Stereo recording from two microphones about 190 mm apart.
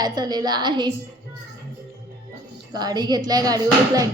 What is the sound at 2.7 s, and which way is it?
Speech, 20° right (ahead or behind).